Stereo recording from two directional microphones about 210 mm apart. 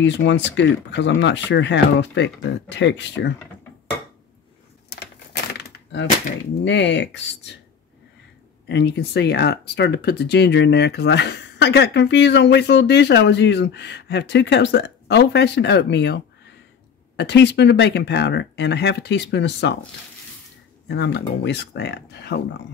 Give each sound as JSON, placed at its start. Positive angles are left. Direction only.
{"t": 0.0, "sound": "speech", "side_deg": 55}
{"t": 5.6, "sound": "a sound", "side_deg": 55}
{"t": 6.6, "sound": "speech", "side_deg": 60}
{"t": 8.6, "sound": "speech", "side_deg": 55}
{"t": 17.2, "sound": "speech", "side_deg": 55}
{"t": 20.9, "sound": "speech", "side_deg": 55}